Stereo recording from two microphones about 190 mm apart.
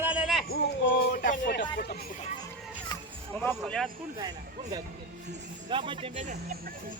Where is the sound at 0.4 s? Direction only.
60° left (ahead or behind).